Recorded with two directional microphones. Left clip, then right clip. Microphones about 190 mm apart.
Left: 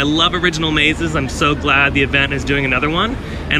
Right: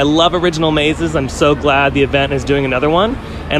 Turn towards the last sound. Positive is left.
turn(degrees=-20)  # may be behind; listen again after turning